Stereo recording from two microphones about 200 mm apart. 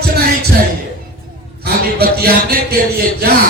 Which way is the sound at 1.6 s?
50° right (ahead or behind).